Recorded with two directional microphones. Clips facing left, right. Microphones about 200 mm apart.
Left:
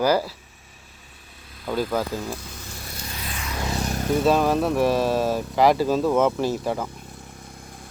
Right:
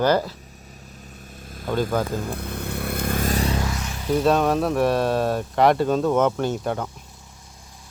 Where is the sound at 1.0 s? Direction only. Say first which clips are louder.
Right 9 dB; 45° right (ahead or behind).